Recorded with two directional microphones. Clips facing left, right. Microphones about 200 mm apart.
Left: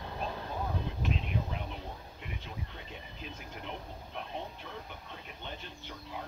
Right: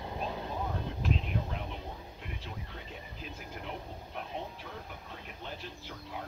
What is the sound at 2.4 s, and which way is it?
Vehicle, centre (ahead or behind).